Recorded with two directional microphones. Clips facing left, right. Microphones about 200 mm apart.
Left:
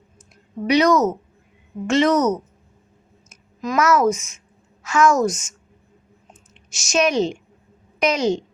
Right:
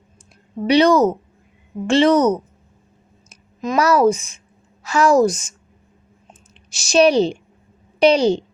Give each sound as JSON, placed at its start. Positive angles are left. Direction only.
{"t": 0.7, "sound": "a woman's voice", "side_deg": -30}